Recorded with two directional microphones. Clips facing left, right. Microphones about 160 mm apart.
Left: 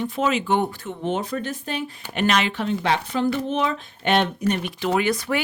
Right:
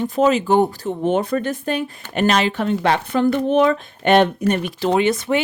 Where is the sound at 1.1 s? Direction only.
55° right (ahead or behind); by 2.6 s 35° right (ahead or behind).